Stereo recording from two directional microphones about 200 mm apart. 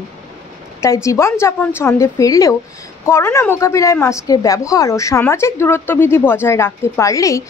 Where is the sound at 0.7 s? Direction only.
15° left (ahead or behind).